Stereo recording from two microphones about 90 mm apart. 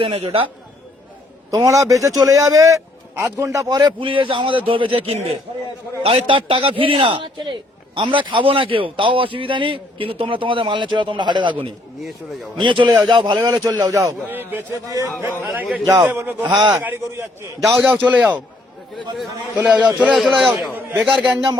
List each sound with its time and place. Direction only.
0.0 s a man's voice: 90° right
1.5 s a man's voice: 35° right (ahead or behind)
4.0 s a man's voice: 75° right (ahead or behind); by 14.2 s 35° right (ahead or behind)
14.3 s a man's voice: 20° right (ahead or behind)
14.8 s a man's voice: 40° right (ahead or behind)
15.9 s a man's voice: 25° right (ahead or behind)
17.6 s speech: 5° right (ahead or behind)
17.9 s a man's voice: 15° right (ahead or behind)
19.5 s a man's voice: 15° right (ahead or behind)
20.6 s a man's voice: 20° right (ahead or behind)
21.0 s speech: 5° right (ahead or behind)